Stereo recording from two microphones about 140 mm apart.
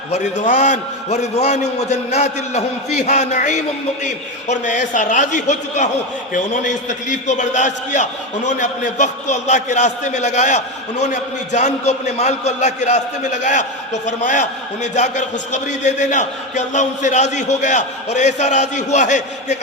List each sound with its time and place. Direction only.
0.1 s a man's voice: 55° left (ahead or behind)